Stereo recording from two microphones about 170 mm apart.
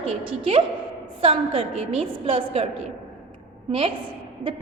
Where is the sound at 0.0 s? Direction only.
35° right (ahead or behind).